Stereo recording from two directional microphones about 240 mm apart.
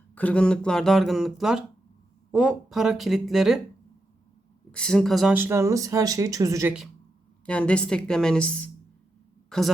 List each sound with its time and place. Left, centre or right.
0.1 s speech: centre
4.7 s speech: centre
7.4 s speech: centre